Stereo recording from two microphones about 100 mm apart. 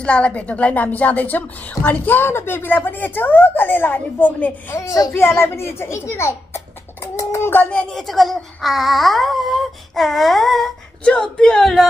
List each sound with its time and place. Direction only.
0.0 s a woman's voice: 10° left (ahead or behind)
4.7 s a woman's voice: 30° left (ahead or behind)
7.7 s speech: 5° left (ahead or behind)